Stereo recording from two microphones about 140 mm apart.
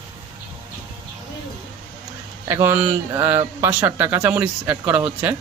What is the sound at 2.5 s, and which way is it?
Speech, 15° right (ahead or behind).